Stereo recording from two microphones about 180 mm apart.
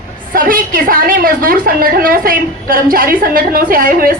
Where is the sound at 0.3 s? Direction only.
50° right (ahead or behind).